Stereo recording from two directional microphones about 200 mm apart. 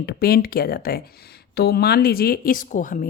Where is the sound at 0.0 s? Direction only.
50° left (ahead or behind).